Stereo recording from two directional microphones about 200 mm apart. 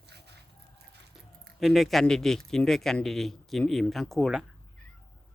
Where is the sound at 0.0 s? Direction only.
55° right (ahead or behind).